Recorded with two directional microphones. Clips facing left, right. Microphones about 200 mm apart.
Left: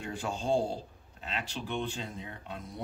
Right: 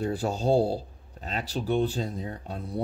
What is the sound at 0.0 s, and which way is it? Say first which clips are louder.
Speech: right 8 dB; 35° right (ahead or behind).